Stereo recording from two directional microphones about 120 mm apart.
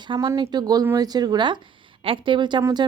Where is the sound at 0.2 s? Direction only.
35° right (ahead or behind).